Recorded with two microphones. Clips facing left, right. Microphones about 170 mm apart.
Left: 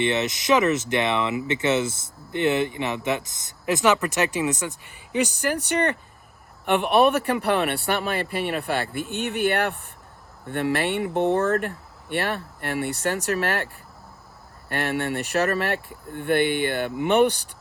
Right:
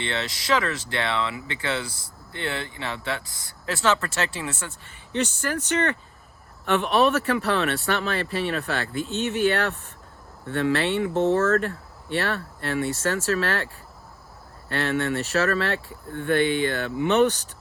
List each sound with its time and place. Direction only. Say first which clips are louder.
0.0 s speech: left 6 dB; 20° left (ahead or behind)
14.7 s speech: right 1 dB; 15° left (ahead or behind)